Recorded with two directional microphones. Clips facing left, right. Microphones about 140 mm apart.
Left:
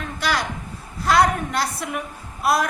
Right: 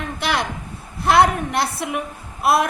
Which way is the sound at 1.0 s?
25° right (ahead or behind).